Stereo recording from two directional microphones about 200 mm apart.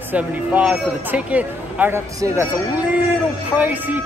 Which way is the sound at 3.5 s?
10° right (ahead or behind).